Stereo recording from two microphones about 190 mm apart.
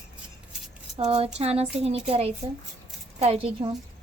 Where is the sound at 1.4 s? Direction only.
35° right (ahead or behind).